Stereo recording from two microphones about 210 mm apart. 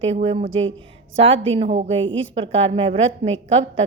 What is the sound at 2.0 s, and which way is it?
Speech, 65° right (ahead or behind).